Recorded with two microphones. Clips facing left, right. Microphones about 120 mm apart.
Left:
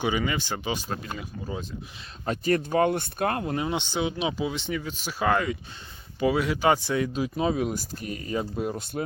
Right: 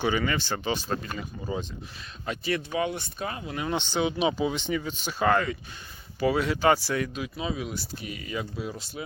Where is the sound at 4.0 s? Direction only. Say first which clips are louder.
Right 4 dB; centre (ahead or behind); by 7.1 s 20° left (ahead or behind).